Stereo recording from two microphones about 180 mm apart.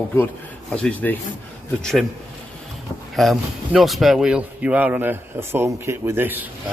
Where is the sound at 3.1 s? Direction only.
Centre (ahead or behind).